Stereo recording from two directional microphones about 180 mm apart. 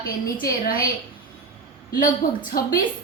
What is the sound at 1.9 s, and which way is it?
Speech, 50° left (ahead or behind).